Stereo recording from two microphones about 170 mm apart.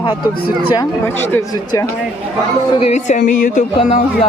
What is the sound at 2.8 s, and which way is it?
Music, 40° left (ahead or behind).